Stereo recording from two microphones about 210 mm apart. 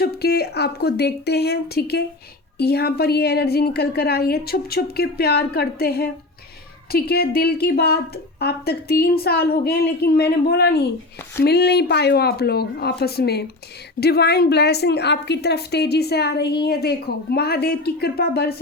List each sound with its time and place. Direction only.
0.0 s a woman's voice: 50° left (ahead or behind)